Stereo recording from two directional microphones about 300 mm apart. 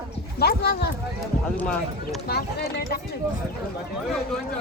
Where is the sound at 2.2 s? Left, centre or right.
Left.